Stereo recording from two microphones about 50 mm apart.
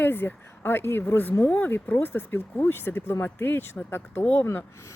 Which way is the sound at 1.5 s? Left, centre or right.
Left.